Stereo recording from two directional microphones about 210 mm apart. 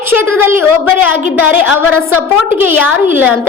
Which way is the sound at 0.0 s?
10° right (ahead or behind).